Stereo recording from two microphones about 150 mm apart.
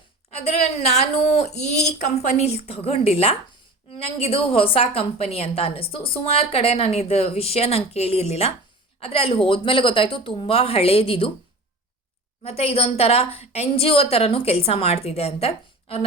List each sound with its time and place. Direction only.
0.3 s a woman's voice: 45° left (ahead or behind)
12.4 s a woman's voice: 45° left (ahead or behind)